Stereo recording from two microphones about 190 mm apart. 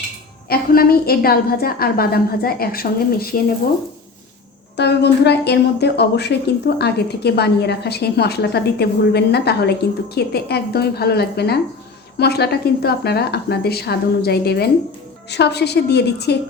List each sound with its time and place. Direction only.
0.4 s a woman's voice: 50° left (ahead or behind)
4.8 s a woman's voice: 60° left (ahead or behind)